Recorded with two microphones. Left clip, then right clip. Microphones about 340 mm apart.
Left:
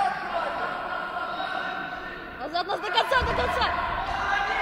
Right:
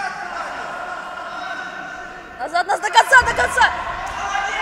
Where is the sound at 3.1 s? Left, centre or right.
Right.